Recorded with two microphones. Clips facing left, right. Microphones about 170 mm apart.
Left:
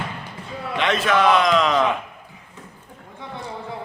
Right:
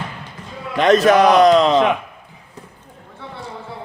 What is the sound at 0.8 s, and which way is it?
A man's voice, 40° right (ahead or behind).